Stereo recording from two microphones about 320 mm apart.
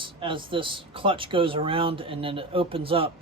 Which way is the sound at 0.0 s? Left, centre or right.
Centre.